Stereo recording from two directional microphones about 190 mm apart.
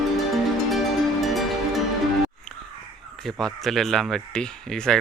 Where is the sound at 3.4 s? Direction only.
Centre (ahead or behind).